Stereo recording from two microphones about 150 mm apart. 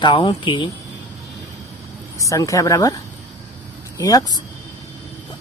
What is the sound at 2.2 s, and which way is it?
Speech, 20° left (ahead or behind).